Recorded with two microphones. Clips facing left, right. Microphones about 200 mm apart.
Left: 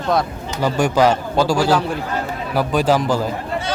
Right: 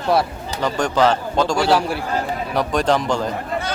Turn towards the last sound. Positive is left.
turn(degrees=5)  # may be behind; listen again after turning